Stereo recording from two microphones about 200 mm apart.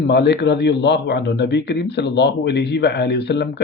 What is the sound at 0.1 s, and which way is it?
Speech, 55° left (ahead or behind).